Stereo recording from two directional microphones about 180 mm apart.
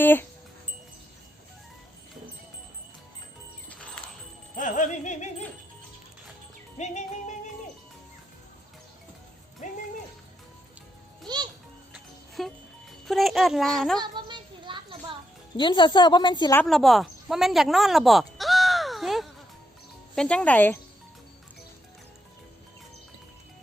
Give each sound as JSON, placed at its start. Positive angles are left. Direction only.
{"t": 0.0, "sound": "speech", "side_deg": 10}
{"t": 3.7, "sound": "music", "side_deg": 5}
{"t": 4.5, "sound": "music", "side_deg": 45}
{"t": 6.7, "sound": "music", "side_deg": 40}
{"t": 9.6, "sound": "music", "side_deg": 45}
{"t": 12.4, "sound": "music", "side_deg": 0}
{"t": 13.1, "sound": "a child's voice", "side_deg": 0}
{"t": 14.0, "sound": "child singing", "side_deg": -25}
{"t": 15.5, "sound": "a woman's voice", "side_deg": 25}
{"t": 16.6, "sound": "speech", "side_deg": 0}